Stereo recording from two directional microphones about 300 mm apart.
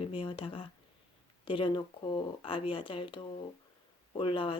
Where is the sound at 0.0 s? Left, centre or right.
Centre.